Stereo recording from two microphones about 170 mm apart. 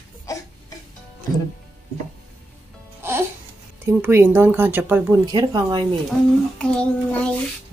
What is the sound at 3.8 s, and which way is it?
Speech, 15° right (ahead or behind).